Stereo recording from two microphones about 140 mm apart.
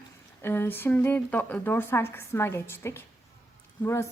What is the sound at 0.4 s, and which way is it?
A woman's voice, 15° left (ahead or behind).